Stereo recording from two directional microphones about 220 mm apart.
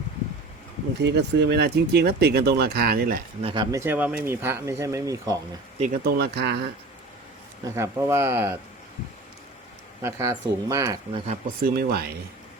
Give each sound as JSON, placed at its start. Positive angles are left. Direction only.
{"t": 1.0, "sound": "speech", "side_deg": -50}
{"t": 3.4, "sound": "speech", "side_deg": -20}
{"t": 5.8, "sound": "speech", "side_deg": -40}
{"t": 7.6, "sound": "speech", "side_deg": -15}
{"t": 10.0, "sound": "speech", "side_deg": -15}
{"t": 11.3, "sound": "speech", "side_deg": -40}